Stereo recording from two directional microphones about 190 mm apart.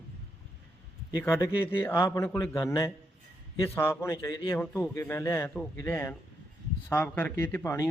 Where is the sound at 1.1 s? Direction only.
15° left (ahead or behind).